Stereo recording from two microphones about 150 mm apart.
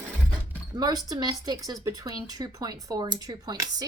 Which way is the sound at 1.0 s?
25° right (ahead or behind).